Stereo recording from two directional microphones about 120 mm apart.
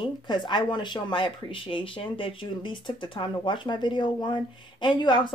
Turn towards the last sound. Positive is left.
turn(degrees=35)  # may be behind; listen again after turning